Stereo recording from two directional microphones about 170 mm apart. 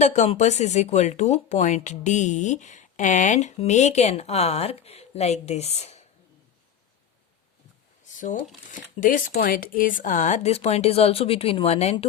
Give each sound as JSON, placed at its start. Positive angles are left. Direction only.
{"t": 0.0, "sound": "speech", "side_deg": 45}
{"t": 8.0, "sound": "a sound", "side_deg": 50}
{"t": 9.0, "sound": "speech", "side_deg": 50}